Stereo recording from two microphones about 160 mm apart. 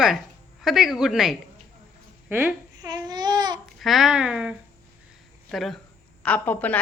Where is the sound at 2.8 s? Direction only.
25° right (ahead or behind).